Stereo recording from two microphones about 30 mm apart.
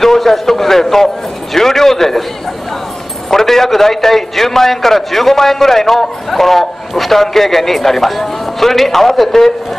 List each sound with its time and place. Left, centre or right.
0.0 s a man's voice: centre
3.3 s a man's voice: centre